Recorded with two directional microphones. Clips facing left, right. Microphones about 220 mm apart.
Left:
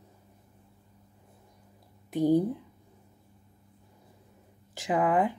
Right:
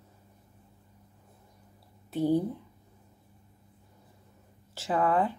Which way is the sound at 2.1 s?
15° left (ahead or behind).